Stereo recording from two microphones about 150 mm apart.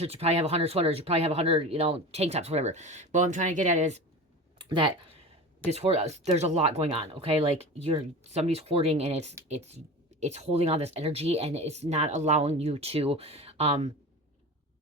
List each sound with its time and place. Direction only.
0.0 s speech: 40° right (ahead or behind)
4.5 s a sound: 30° right (ahead or behind)
5.6 s speech: 45° right (ahead or behind)